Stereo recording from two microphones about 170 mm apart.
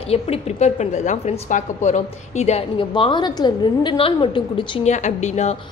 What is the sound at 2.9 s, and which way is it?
A woman's voice, 25° left (ahead or behind).